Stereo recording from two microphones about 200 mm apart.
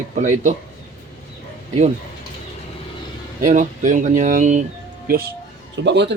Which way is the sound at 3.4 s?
40° right (ahead or behind).